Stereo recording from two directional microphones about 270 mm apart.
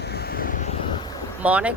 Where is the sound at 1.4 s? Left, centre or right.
Centre.